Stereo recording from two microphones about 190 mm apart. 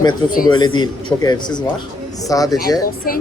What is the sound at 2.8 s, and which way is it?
Speech, 50° left (ahead or behind).